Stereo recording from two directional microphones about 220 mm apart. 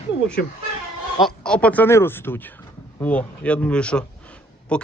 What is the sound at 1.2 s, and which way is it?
Speech, 5° left (ahead or behind).